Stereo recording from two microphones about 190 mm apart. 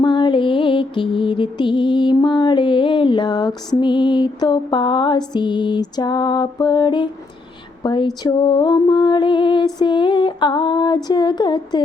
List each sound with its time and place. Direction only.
0.0 s music: 25° left (ahead or behind)